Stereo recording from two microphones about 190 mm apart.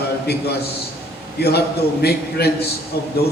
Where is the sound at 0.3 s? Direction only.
55° left (ahead or behind).